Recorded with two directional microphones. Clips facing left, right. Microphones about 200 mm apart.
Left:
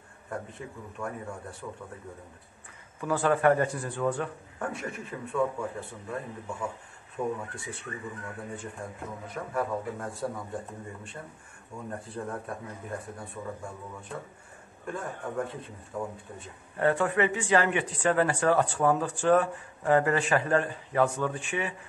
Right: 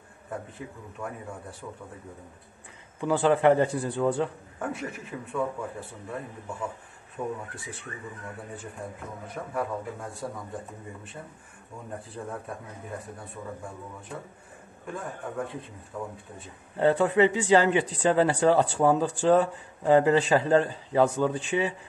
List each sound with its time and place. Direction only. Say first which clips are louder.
3.0 s speech: right 3 dB; 25° right (ahead or behind)
4.6 s a man's voice: right 1 dB; centre (ahead or behind)
7.2 s a man's voice: left 2 dB; centre (ahead or behind)
9.3 s a man's voice: even; centre (ahead or behind)
12.1 s a man's voice: left 1 dB; centre (ahead or behind)
14.9 s a man's voice: left 1 dB; centre (ahead or behind)
16.7 s speech: right 4 dB; 25° right (ahead or behind)